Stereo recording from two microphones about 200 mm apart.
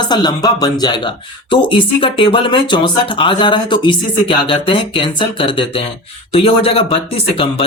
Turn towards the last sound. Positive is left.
turn(degrees=30)  # may be behind; listen again after turning